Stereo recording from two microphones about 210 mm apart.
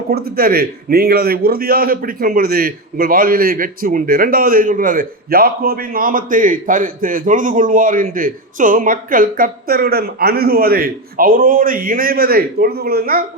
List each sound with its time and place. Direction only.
0.1 s a man's voice: 45° right (ahead or behind)